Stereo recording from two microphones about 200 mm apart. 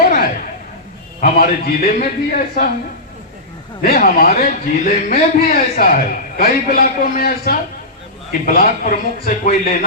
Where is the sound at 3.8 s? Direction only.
50° left (ahead or behind).